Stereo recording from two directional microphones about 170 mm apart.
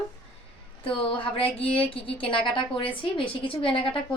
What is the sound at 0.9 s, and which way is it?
A woman's voice, 30° left (ahead or behind).